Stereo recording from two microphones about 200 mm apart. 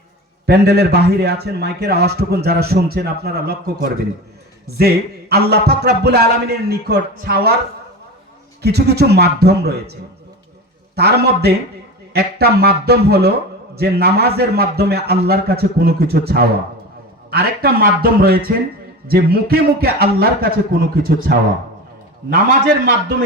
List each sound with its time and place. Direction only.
0.4 s a man's voice: 55° right (ahead or behind)
8.6 s a man's voice: 55° right (ahead or behind)